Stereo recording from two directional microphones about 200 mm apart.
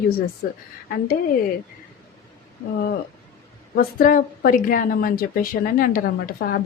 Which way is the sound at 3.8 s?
45° left (ahead or behind).